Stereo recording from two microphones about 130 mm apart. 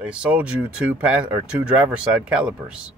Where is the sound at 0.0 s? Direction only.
10° right (ahead or behind).